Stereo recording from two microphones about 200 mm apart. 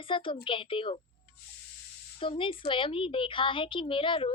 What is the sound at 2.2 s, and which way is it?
A woman's voice, 25° left (ahead or behind).